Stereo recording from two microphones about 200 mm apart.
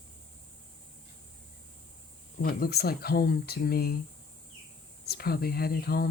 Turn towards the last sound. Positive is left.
turn(degrees=50)  # may be behind; listen again after turning